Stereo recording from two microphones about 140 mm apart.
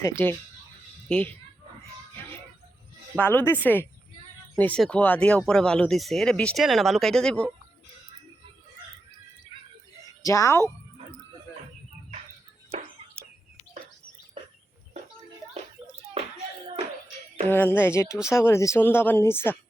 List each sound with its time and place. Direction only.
0.0 s speech: 15° left (ahead or behind)
3.2 s speech: 15° left (ahead or behind)
10.2 s speech: 20° left (ahead or behind)
17.5 s speech: 15° left (ahead or behind)